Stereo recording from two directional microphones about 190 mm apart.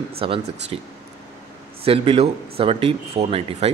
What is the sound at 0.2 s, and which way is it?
Speech, 25° right (ahead or behind).